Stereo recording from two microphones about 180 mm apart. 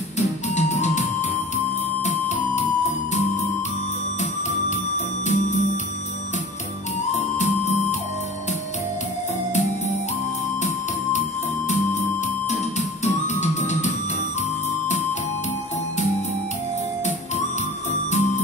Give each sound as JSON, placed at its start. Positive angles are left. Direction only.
{"t": 0.6, "sound": "music", "side_deg": 40}
{"t": 2.0, "sound": "music", "side_deg": 40}
{"t": 4.2, "sound": "music", "side_deg": 40}
{"t": 7.2, "sound": "music", "side_deg": 40}
{"t": 13.0, "sound": "music", "side_deg": 40}